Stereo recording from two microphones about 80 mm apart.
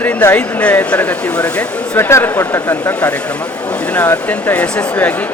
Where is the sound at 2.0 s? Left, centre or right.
Left.